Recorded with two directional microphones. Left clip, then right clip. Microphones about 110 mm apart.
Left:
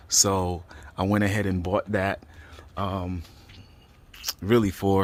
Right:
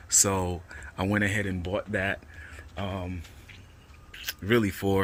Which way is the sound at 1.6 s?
70° left (ahead or behind).